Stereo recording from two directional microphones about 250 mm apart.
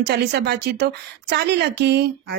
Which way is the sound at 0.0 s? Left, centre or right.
Right.